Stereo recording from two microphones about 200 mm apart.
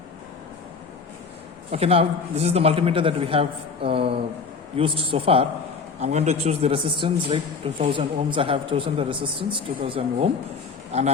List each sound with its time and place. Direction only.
1.7 s speech: 30° right (ahead or behind)